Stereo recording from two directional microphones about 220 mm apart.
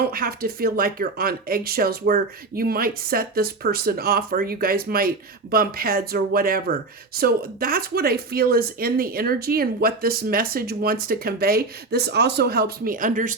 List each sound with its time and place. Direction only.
0.0 s speech: 40° right (ahead or behind)